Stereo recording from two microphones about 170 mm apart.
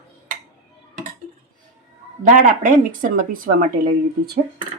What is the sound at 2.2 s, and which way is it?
A woman's voice, 50° right (ahead or behind).